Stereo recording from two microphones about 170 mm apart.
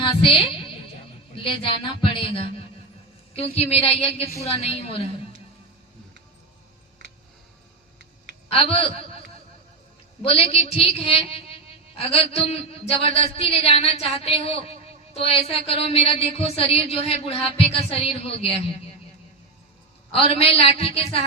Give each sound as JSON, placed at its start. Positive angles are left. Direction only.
{"t": 0.0, "sound": "a sound", "side_deg": 30}
{"t": 1.5, "sound": "speech", "side_deg": 30}
{"t": 8.4, "sound": "speech", "side_deg": 35}
{"t": 10.2, "sound": "speech", "side_deg": 35}
{"t": 20.1, "sound": "speech", "side_deg": 35}